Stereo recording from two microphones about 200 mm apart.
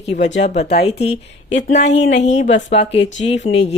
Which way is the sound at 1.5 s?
65° left (ahead or behind).